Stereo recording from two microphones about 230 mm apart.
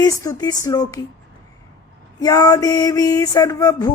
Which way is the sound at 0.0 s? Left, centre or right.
Centre.